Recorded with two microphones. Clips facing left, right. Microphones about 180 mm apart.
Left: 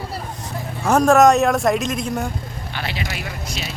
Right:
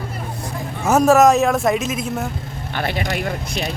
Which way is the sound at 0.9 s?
5° right (ahead or behind).